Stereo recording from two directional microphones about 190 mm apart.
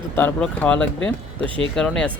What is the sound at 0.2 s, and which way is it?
Speech, 10° left (ahead or behind).